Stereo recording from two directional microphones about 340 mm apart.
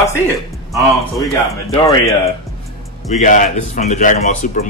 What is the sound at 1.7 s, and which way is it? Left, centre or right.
A man's voice, centre.